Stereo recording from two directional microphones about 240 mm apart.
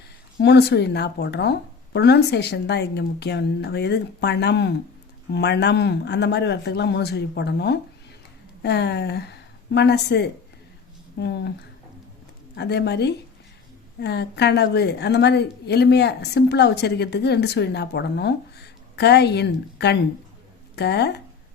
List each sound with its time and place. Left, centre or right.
0.3 s a woman's voice: left
12.5 s a woman's voice: left